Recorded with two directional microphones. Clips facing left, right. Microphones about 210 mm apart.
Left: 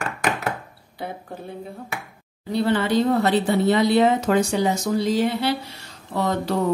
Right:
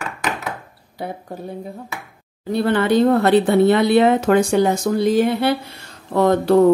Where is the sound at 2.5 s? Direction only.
55° right (ahead or behind).